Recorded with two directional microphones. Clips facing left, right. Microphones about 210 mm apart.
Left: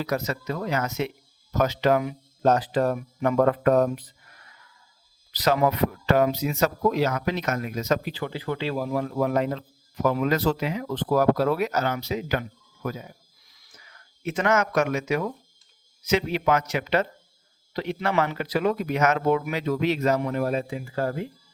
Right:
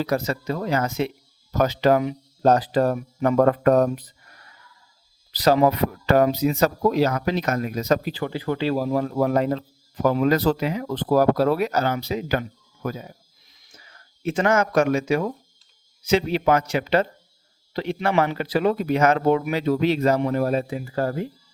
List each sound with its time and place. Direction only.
0.0 s speech: 30° right (ahead or behind)
13.5 s a sound: 25° right (ahead or behind)
16.0 s a man's voice: 30° right (ahead or behind)